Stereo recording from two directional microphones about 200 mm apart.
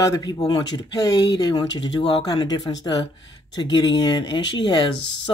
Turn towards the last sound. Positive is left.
turn(degrees=25)  # may be behind; listen again after turning